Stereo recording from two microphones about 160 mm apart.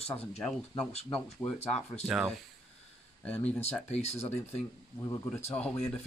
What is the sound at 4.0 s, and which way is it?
Speech, 40° left (ahead or behind).